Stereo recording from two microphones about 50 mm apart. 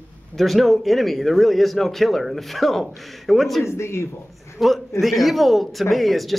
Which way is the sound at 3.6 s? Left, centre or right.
Left.